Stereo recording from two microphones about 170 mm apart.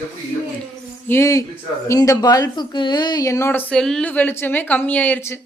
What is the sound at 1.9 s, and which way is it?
Speech, 20° left (ahead or behind).